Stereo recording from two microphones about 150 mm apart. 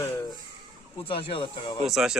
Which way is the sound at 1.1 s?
35° left (ahead or behind).